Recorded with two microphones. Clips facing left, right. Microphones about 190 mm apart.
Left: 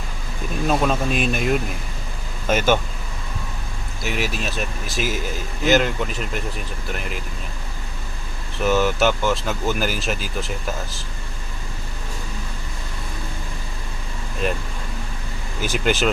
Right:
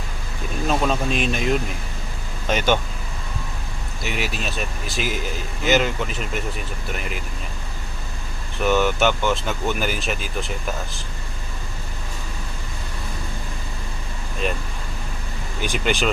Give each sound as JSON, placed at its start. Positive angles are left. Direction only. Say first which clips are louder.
{"t": 0.7, "sound": "speech", "louder": "left 1 dB", "side_deg": 5}
{"t": 4.0, "sound": "speech", "louder": "left 2 dB", "side_deg": 0}
{"t": 8.6, "sound": "speech", "louder": "even", "side_deg": 0}
{"t": 15.6, "sound": "speech", "louder": "left 2 dB", "side_deg": 5}